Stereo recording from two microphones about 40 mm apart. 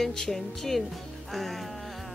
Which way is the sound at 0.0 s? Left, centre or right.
Centre.